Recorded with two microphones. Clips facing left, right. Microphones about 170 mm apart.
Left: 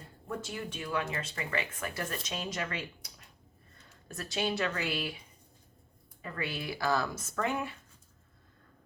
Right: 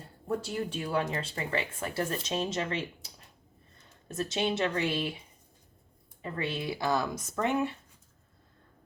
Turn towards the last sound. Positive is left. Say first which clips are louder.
# right 4 dB
turn(degrees=-25)  # may be behind; listen again after turning